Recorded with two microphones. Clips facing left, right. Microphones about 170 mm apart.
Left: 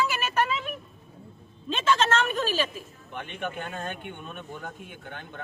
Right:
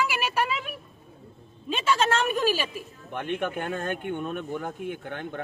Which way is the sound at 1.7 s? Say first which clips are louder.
Even; 10° right (ahead or behind).